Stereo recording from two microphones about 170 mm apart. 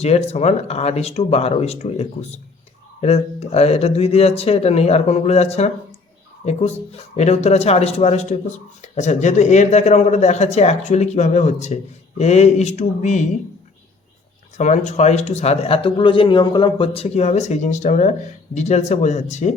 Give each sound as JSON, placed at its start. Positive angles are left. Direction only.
{"t": 0.0, "sound": "speech", "side_deg": 40}
{"t": 14.6, "sound": "speech", "side_deg": 40}